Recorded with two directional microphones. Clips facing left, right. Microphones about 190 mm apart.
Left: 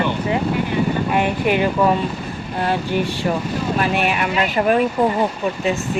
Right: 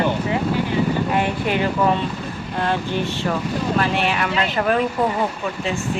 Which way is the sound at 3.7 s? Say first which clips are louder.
Left 2 dB; 15° left (ahead or behind).